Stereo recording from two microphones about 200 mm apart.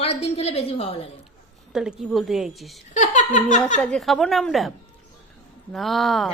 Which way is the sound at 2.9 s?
40° left (ahead or behind).